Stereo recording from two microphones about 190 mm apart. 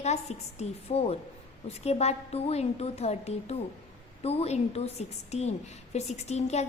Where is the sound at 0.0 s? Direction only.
35° left (ahead or behind).